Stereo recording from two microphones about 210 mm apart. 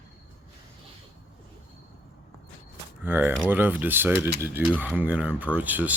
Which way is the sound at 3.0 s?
10° right (ahead or behind).